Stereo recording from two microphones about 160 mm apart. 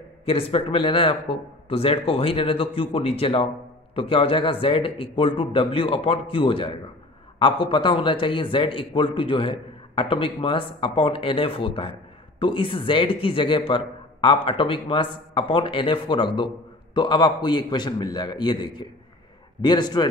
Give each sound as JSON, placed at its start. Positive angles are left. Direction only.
{"t": 0.2, "sound": "a man's voice", "side_deg": 35}